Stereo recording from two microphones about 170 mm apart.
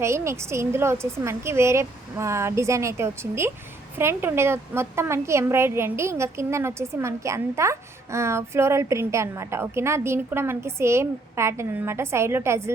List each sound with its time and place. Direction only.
0.0 s a woman's voice: 15° right (ahead or behind)